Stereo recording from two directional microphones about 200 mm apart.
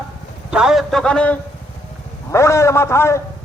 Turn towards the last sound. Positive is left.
turn(degrees=15)  # may be behind; listen again after turning